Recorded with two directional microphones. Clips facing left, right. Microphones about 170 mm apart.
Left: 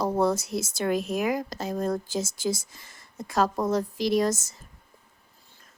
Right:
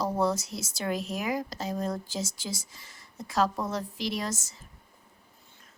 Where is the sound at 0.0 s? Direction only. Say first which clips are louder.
Left 3 dB; 55° left (ahead or behind).